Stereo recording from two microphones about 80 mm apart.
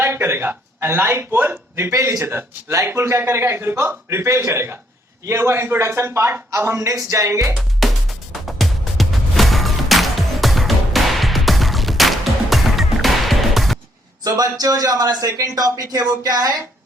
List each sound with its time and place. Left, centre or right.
0.0 s a man's voice: right
7.8 s music: centre
14.3 s a man's voice: right